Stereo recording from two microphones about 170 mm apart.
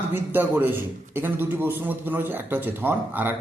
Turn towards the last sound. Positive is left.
turn(degrees=-10)  # may be behind; listen again after turning